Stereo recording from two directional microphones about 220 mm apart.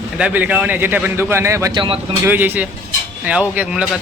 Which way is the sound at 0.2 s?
5° right (ahead or behind).